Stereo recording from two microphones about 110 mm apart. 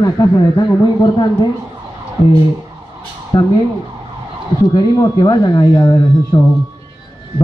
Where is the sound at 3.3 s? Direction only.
40° left (ahead or behind).